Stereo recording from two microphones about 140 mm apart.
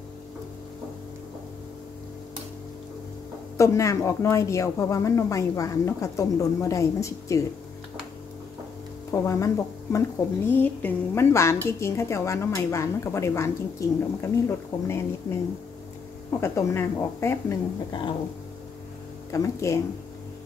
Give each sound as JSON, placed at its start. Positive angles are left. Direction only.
{"t": 3.5, "sound": "a woman's voice", "side_deg": 20}
{"t": 9.1, "sound": "a woman's voice", "side_deg": 20}
{"t": 19.3, "sound": "a woman's voice", "side_deg": 20}